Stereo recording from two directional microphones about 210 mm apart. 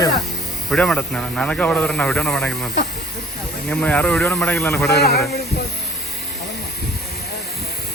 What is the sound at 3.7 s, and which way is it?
Speech, 5° left (ahead or behind).